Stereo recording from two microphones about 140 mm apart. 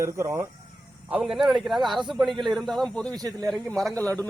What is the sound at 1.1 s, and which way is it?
Speech, 5° right (ahead or behind).